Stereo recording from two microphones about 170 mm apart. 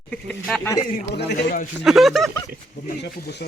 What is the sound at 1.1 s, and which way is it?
Speech, 75° left (ahead or behind).